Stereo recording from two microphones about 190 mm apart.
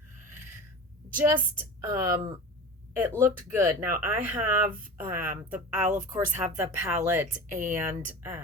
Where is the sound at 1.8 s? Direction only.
15° right (ahead or behind).